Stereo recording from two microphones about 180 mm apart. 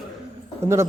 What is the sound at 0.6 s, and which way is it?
Speech, 15° right (ahead or behind).